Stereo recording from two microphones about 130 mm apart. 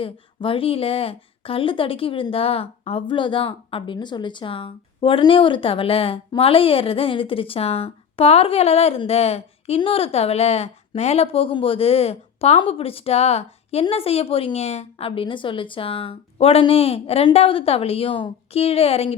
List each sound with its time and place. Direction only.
0.0 s a woman's voice: 45° left (ahead or behind)